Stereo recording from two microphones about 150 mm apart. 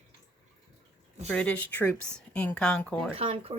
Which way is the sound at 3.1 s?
40° right (ahead or behind).